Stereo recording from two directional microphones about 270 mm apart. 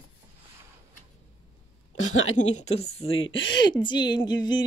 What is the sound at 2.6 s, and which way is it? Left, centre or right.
Speech, left.